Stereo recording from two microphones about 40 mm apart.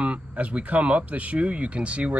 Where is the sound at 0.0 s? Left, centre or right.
Right.